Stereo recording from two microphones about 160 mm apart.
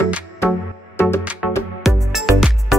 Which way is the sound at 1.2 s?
10° right (ahead or behind).